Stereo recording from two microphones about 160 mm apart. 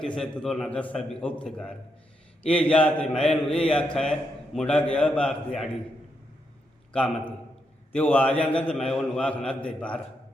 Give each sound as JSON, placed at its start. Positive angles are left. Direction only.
{"t": 0.0, "sound": "a man's voice", "side_deg": 5}
{"t": 7.9, "sound": "a man's voice", "side_deg": 10}